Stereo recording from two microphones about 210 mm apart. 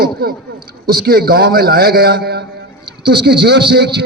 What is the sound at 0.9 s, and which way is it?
A man's voice, 45° right (ahead or behind).